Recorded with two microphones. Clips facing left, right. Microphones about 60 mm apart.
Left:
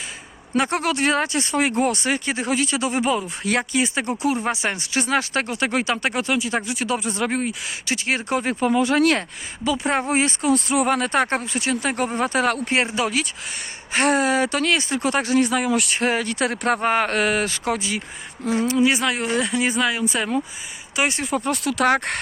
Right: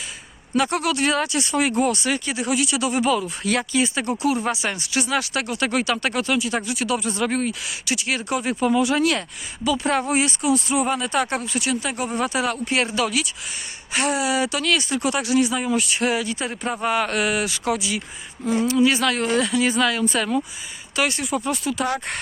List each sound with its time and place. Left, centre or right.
0.5 s speech: left
9.6 s speech: left
12.7 s speech: left
13.9 s speech: left
15.9 s speech: left
16.2 s speech: left
16.8 s speech: left
18.6 s speech: left
19.8 s speech: centre
20.9 s speech: left
21.2 s speech: left
21.5 s speech: left